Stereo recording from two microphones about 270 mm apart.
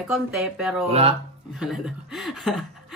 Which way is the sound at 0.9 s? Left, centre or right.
Right.